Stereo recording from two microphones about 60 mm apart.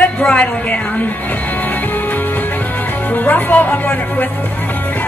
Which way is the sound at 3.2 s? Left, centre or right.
Left.